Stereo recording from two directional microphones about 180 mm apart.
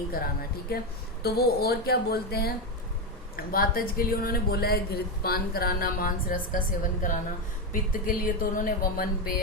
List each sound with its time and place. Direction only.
0.7 s speech: 60° left (ahead or behind)